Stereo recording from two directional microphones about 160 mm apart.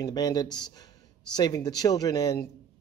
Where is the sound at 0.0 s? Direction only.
25° left (ahead or behind).